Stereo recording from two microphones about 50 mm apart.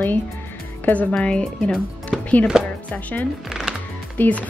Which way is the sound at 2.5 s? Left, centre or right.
Centre.